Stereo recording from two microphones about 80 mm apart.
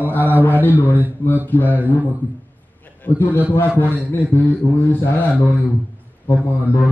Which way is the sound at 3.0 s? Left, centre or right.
Left.